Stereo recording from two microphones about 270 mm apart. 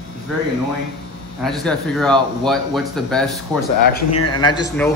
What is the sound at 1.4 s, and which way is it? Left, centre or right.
Speech, centre.